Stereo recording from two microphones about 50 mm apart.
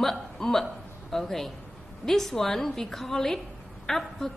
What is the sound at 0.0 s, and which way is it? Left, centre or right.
A woman's voice, centre.